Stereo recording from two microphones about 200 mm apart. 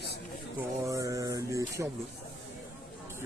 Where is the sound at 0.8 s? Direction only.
15° right (ahead or behind).